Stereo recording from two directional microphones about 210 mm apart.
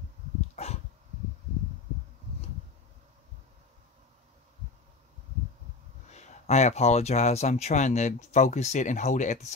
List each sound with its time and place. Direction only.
0.6 s dog: 30° left (ahead or behind)
6.0 s speech: 30° left (ahead or behind)